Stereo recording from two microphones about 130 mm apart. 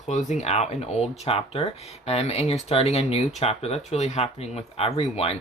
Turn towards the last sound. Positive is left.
turn(degrees=50)  # may be behind; listen again after turning